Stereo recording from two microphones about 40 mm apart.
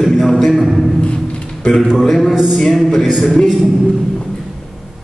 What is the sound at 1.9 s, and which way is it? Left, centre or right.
Speech, centre.